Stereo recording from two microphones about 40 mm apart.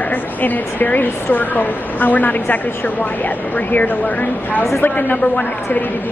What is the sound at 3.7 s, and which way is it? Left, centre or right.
A woman's voice, left.